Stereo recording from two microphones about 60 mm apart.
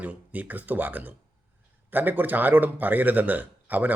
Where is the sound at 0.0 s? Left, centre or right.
Right.